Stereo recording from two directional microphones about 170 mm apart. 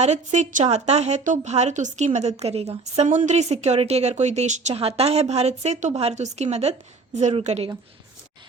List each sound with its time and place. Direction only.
0.0 s a woman's voice: 40° right (ahead or behind)